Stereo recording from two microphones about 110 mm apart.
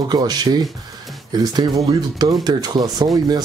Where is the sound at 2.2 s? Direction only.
40° right (ahead or behind).